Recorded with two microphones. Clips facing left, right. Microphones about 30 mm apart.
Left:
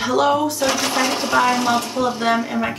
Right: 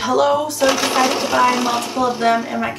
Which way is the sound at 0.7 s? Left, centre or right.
Right.